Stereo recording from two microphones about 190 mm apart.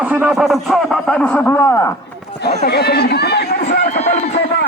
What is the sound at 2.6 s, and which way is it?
Chatter, 60° left (ahead or behind).